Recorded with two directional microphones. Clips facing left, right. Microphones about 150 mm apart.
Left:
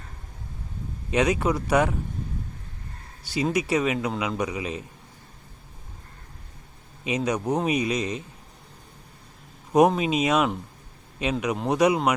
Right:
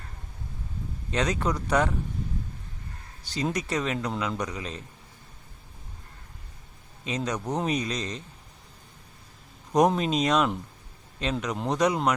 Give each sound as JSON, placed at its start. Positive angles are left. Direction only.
{"t": 1.1, "sound": "a man's voice", "side_deg": 10}
{"t": 3.2, "sound": "a man's voice", "side_deg": 10}
{"t": 7.2, "sound": "a man's voice", "side_deg": 10}
{"t": 9.7, "sound": "a man's voice", "side_deg": 5}